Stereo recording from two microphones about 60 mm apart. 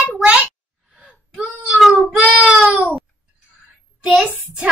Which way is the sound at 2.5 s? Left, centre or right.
Right.